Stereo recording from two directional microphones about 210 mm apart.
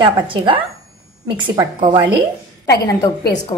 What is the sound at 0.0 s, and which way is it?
A woman's voice, 25° right (ahead or behind).